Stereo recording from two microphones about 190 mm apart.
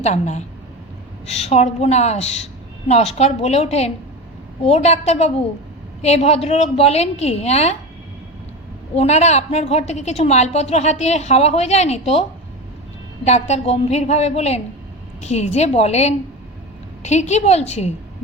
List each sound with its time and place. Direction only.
0.0 s a woman's voice: 35° left (ahead or behind)
9.0 s a woman's voice: 35° left (ahead or behind)
13.2 s a woman's voice: 35° left (ahead or behind)